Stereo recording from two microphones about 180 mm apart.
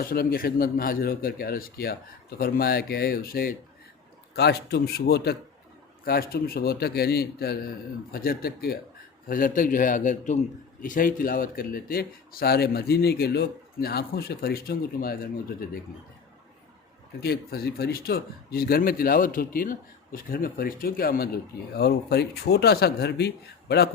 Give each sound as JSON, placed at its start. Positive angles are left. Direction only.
{"t": 0.0, "sound": "speech", "side_deg": 55}
{"t": 4.4, "sound": "speech", "side_deg": 65}
{"t": 17.2, "sound": "speech", "side_deg": 60}